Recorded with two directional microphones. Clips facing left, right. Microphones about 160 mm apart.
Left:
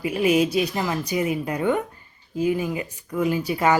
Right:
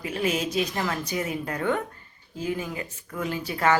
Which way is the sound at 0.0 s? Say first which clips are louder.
Left 7 dB; 10° left (ahead or behind).